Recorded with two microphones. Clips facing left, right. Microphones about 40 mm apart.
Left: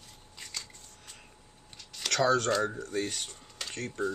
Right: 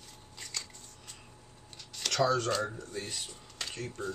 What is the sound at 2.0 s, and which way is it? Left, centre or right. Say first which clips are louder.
Speech: left 2 dB; left.